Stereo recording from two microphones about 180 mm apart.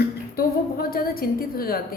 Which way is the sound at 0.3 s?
55° left (ahead or behind).